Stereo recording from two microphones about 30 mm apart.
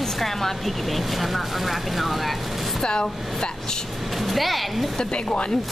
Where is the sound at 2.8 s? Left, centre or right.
Left.